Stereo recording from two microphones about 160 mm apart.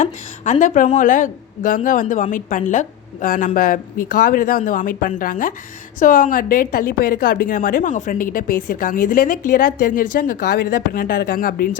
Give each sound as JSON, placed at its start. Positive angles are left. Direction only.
{"t": 0.0, "sound": "a woman's voice", "side_deg": 50}